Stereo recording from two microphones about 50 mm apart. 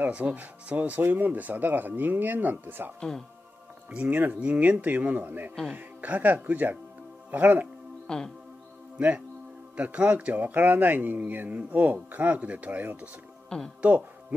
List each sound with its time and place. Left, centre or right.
0.0 s speech: right
3.0 s speech: centre
3.9 s speech: right
8.1 s speech: centre
9.8 s speech: right